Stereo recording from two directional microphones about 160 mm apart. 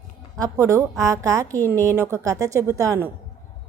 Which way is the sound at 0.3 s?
20° right (ahead or behind).